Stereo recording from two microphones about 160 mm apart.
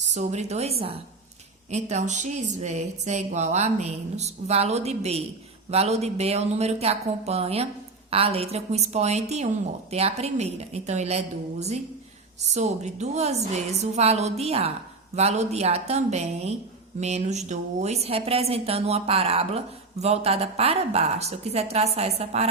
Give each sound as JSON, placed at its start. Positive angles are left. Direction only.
{"t": 0.1, "sound": "a woman's voice", "side_deg": -45}
{"t": 12.5, "sound": "a woman's voice", "side_deg": -45}